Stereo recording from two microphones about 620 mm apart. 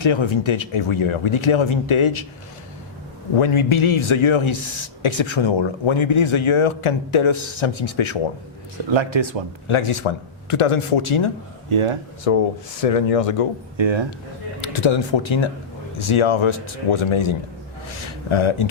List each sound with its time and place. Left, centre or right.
0.0 s speech: left
3.3 s speech: left
8.9 s speech: right
9.6 s speech: left
11.7 s speech: right
12.3 s speech: left
13.7 s speech: right
14.6 s speech: left